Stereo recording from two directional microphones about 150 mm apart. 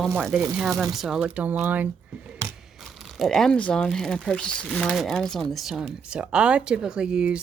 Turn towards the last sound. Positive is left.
turn(degrees=-5)  # may be behind; listen again after turning